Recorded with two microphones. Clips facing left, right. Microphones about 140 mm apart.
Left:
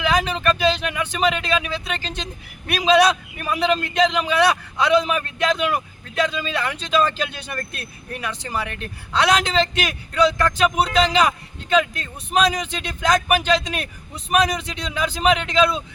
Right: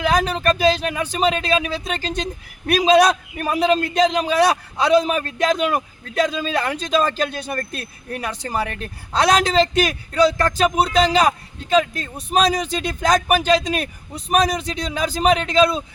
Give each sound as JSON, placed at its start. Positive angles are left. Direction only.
{"t": 0.0, "sound": "speech", "side_deg": -45}